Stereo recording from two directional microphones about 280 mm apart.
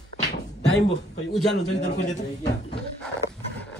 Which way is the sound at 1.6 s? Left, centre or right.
Left.